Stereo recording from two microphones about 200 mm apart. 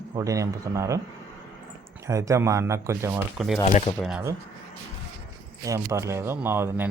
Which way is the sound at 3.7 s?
35° left (ahead or behind).